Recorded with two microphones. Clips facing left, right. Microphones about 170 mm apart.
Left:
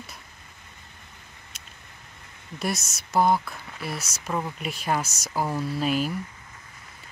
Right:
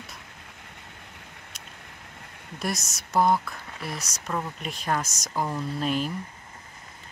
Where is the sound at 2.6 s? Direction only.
Centre (ahead or behind).